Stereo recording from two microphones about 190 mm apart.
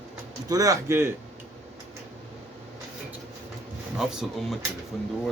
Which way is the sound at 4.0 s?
Centre (ahead or behind).